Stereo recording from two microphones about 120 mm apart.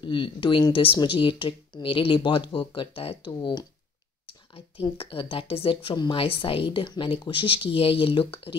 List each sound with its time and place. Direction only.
0.0 s a woman's voice: 45° left (ahead or behind)
4.3 s a woman's voice: 50° left (ahead or behind)